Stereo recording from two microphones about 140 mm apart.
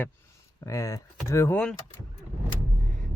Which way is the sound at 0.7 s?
20° left (ahead or behind).